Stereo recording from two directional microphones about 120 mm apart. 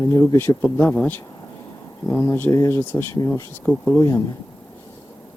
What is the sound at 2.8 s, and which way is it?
Speech, 15° left (ahead or behind).